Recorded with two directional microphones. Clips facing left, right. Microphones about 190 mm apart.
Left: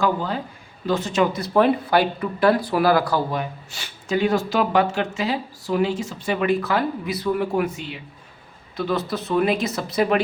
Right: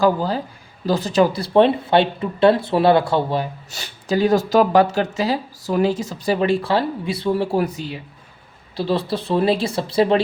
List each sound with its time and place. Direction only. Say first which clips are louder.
0.0 s speech: right 4 dB; 35° right (ahead or behind)
3.7 s speech: right 1 dB; 40° right (ahead or behind)